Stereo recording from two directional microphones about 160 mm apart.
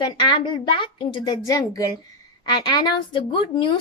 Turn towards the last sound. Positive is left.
turn(degrees=30)  # may be behind; listen again after turning